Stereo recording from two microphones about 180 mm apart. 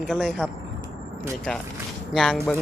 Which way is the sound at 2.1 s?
Centre (ahead or behind).